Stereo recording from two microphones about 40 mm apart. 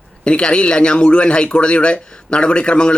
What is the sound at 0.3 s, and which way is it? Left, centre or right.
Speech, left.